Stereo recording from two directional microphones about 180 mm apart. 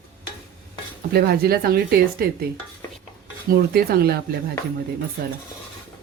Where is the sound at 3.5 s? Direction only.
60° right (ahead or behind).